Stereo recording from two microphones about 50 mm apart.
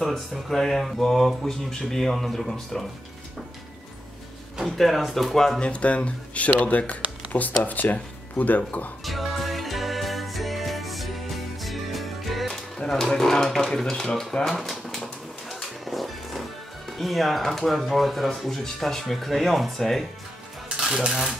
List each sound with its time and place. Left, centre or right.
0.0 s speech: centre
4.6 s speech: centre
5.6 s speech: left
9.0 s music: centre
12.7 s speech: centre
15.4 s music: centre
16.9 s speech: centre
20.8 s speech: centre